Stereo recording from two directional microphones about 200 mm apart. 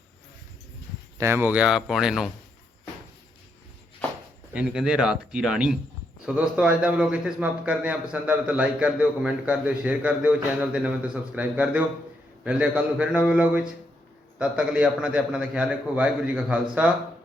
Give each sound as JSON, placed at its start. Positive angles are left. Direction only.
{"t": 1.2, "sound": "a man's voice", "side_deg": -10}
{"t": 4.5, "sound": "a man's voice", "side_deg": -5}